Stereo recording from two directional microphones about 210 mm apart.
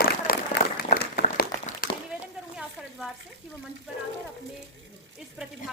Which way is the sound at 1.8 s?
40° left (ahead or behind).